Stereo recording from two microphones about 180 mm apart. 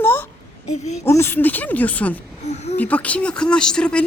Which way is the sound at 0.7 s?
40° left (ahead or behind).